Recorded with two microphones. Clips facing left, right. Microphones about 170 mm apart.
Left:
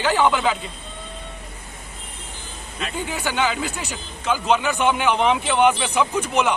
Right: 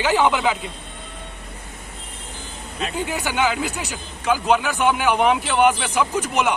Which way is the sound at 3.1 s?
10° right (ahead or behind).